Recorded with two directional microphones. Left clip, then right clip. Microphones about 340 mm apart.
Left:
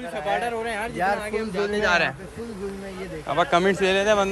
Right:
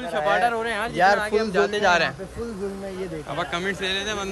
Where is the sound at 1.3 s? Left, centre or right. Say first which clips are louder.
Right 4 dB; right.